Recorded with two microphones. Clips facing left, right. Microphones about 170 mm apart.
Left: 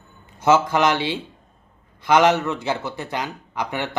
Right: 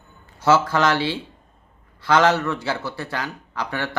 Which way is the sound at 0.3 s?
20° left (ahead or behind).